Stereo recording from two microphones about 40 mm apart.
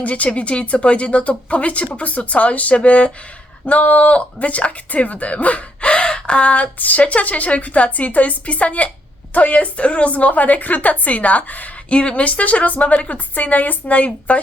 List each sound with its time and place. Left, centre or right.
0.0 s speech: left
11.9 s speech: left